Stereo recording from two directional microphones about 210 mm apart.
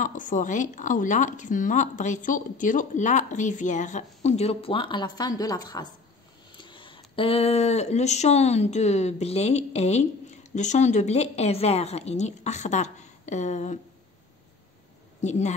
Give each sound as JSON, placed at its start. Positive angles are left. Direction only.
{"t": 0.0, "sound": "speech", "side_deg": 40}
{"t": 15.2, "sound": "speech", "side_deg": 35}